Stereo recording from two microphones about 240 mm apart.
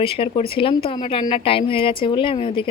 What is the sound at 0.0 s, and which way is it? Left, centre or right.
A woman's voice, left.